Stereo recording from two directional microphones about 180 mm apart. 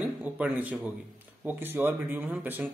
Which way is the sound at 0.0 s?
10° right (ahead or behind).